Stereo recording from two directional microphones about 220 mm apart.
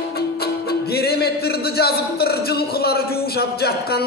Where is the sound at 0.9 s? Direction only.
45° left (ahead or behind).